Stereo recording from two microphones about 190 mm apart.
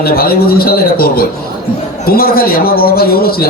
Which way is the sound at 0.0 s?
50° left (ahead or behind).